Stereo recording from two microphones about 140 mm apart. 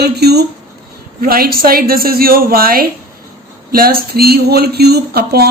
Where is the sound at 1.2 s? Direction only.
90° right.